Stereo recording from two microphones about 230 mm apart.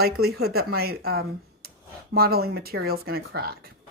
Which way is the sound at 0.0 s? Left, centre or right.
Right.